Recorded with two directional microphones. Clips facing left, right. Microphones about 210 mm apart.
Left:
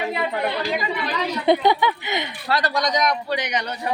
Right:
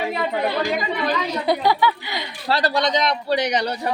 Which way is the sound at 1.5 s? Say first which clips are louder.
Left 2 dB; 20° left (ahead or behind).